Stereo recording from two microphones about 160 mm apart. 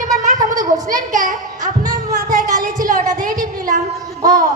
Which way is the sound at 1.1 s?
55° right (ahead or behind).